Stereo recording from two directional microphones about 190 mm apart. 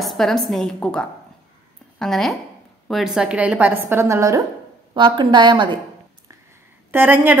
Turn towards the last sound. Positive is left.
turn(degrees=-10)  # may be behind; listen again after turning